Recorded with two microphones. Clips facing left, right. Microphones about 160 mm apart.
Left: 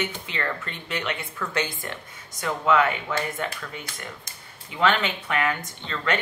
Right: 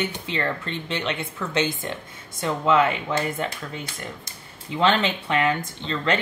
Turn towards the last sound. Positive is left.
turn(degrees=-30)  # may be behind; listen again after turning